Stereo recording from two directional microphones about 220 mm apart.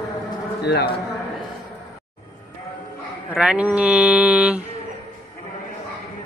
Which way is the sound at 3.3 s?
5° right (ahead or behind).